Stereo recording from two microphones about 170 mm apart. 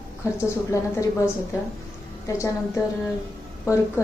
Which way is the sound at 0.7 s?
20° left (ahead or behind).